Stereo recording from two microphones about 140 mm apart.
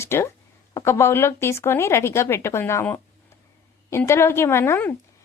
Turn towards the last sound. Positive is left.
turn(degrees=15)  # may be behind; listen again after turning